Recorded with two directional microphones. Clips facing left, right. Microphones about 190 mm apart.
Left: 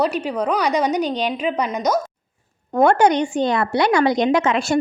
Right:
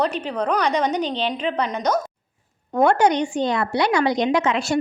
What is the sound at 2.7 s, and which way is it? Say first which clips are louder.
Speech: left 2 dB; 50° left (ahead or behind).